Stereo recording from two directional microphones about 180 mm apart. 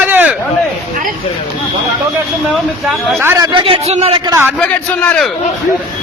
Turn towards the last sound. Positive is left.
turn(degrees=5)  # may be behind; listen again after turning